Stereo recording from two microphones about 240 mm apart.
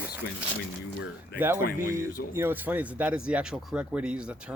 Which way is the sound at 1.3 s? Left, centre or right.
Centre.